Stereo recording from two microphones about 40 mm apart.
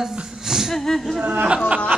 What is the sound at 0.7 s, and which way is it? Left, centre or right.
Speech, centre.